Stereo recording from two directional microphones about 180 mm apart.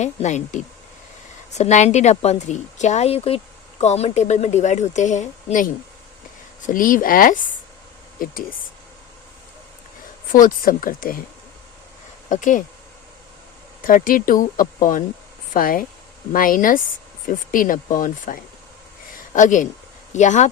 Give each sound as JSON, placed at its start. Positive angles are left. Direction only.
{"t": 0.0, "sound": "a woman's voice", "side_deg": 40}
{"t": 10.3, "sound": "speech", "side_deg": 50}
{"t": 12.3, "sound": "speech", "side_deg": 45}
{"t": 13.8, "sound": "speech", "side_deg": 50}
{"t": 19.1, "sound": "a sound", "side_deg": 45}
{"t": 20.1, "sound": "a woman's voice", "side_deg": 40}